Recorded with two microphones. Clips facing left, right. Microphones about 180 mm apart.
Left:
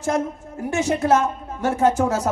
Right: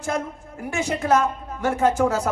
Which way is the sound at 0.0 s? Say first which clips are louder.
Left 4 dB; 40° left (ahead or behind).